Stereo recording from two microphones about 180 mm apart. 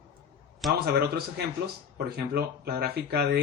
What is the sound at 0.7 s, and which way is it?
Speech, 60° right (ahead or behind).